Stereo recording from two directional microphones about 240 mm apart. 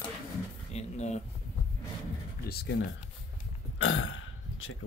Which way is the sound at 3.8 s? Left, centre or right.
Left.